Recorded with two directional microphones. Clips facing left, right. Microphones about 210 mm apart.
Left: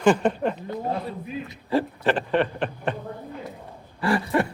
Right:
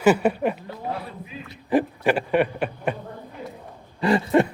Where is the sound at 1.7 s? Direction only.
10° right (ahead or behind).